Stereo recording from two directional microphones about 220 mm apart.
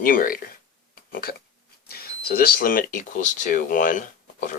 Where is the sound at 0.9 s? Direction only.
40° left (ahead or behind).